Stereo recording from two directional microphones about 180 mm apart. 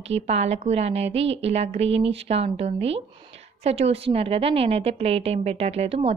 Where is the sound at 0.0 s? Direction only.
35° right (ahead or behind).